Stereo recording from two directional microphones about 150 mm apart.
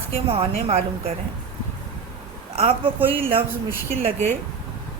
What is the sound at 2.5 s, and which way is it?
Speech, 40° right (ahead or behind).